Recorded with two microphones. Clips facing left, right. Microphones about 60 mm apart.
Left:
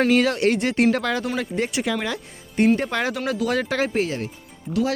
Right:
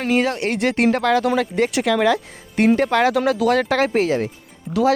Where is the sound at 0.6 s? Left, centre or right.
Right.